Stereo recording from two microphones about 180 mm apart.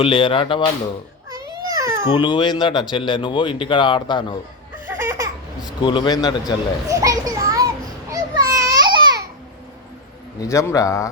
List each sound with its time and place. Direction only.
0.0 s speech: 30° left (ahead or behind)
1.3 s baby cry: 20° right (ahead or behind)
2.0 s speech: 25° left (ahead or behind)
4.9 s laughter: 10° right (ahead or behind)
5.6 s speech: 25° left (ahead or behind)
6.8 s children playing: 20° right (ahead or behind)
8.1 s babbling: 15° right (ahead or behind)
10.4 s a man's voice: 15° left (ahead or behind)